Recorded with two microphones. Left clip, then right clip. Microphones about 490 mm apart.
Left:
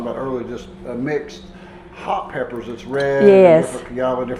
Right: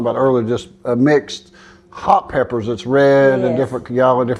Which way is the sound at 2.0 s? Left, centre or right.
Right.